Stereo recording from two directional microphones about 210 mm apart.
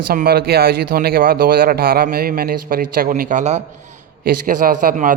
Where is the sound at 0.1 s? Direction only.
45° right (ahead or behind).